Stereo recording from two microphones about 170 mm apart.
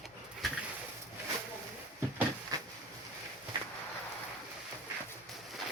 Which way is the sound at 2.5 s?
20° right (ahead or behind).